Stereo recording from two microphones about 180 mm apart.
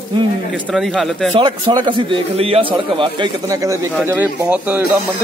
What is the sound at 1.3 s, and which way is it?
A man's voice, 25° right (ahead or behind).